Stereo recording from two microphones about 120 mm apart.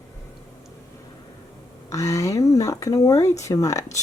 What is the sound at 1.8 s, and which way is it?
Speech, 25° left (ahead or behind).